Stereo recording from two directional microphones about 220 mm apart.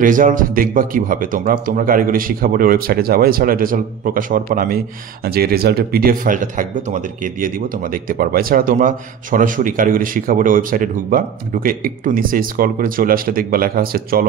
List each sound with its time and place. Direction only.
0.0 s speech: 35° right (ahead or behind)